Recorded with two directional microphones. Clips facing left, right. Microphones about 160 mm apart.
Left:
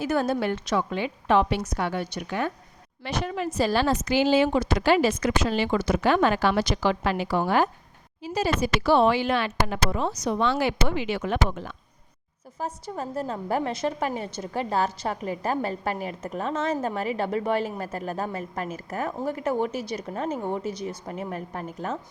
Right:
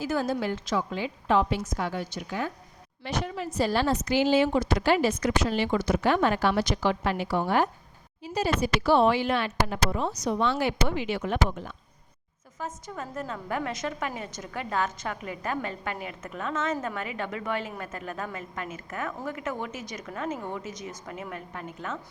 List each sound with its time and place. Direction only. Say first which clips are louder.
0.0 s a woman's voice: left 3 dB; 65° left (ahead or behind)
3.0 s speech: left 3 dB; 90° left
12.5 s a woman's voice: left 4 dB; 35° left (ahead or behind)